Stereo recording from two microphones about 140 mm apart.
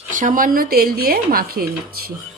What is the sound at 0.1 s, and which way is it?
Speech, 70° right (ahead or behind).